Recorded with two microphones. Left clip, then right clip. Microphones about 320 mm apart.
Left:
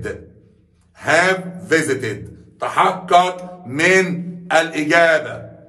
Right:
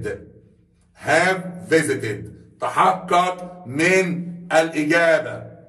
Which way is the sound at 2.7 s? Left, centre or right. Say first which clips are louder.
Left 2 dB; centre.